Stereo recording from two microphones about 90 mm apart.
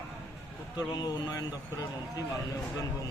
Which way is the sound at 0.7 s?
45° left (ahead or behind).